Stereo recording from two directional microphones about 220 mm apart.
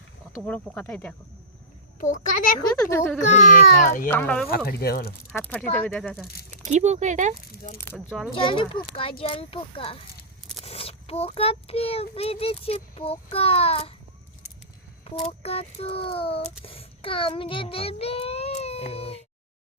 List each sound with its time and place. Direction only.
0.4 s speech: 5° left (ahead or behind)
2.0 s speech: 35° left (ahead or behind)
4.1 s speech: 5° left (ahead or behind)
4.5 s speech: 45° left (ahead or behind)
5.3 s speech: 5° left (ahead or behind)
6.7 s speech: 30° right (ahead or behind)
7.5 s speech: 40° left (ahead or behind)
8.1 s speech: centre (ahead or behind)
8.4 s a child's voice: 20° left (ahead or behind)
15.2 s a child's voice: 25° left (ahead or behind)